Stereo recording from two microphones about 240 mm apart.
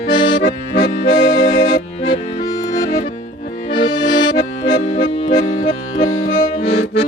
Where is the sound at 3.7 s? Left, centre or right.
Centre.